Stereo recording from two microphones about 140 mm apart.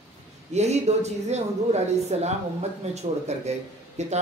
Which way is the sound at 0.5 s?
50° right (ahead or behind).